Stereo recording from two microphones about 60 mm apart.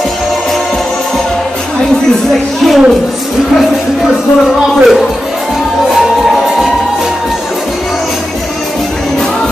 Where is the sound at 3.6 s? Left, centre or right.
Centre.